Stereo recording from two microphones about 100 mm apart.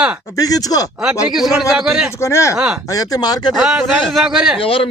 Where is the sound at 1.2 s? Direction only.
5° right (ahead or behind).